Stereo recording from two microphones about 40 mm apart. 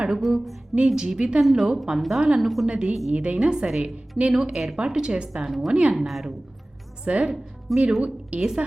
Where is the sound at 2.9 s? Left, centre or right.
Centre.